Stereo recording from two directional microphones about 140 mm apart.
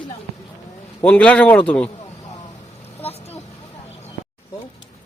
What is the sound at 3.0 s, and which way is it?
Vehicle, 45° left (ahead or behind).